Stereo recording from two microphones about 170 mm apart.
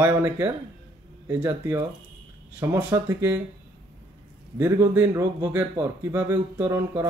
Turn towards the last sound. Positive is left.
turn(degrees=-15)  # may be behind; listen again after turning